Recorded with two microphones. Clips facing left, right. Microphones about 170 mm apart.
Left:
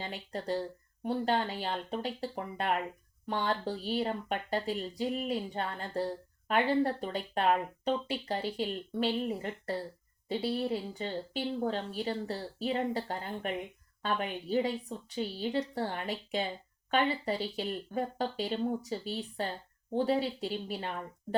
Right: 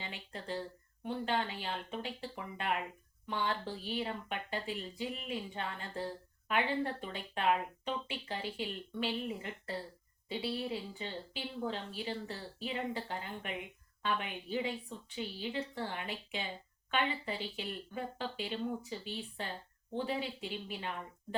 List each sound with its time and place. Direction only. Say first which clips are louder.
0.0 s speech: left 7 dB; 40° left (ahead or behind)